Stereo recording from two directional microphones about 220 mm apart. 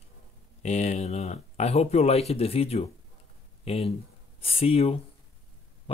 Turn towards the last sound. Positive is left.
turn(degrees=25)  # may be behind; listen again after turning